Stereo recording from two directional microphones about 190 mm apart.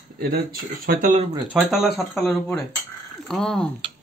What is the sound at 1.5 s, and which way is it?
Speech, 5° right (ahead or behind).